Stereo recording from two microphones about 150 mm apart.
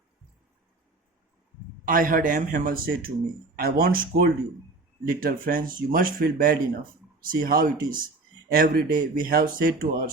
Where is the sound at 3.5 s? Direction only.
90° right.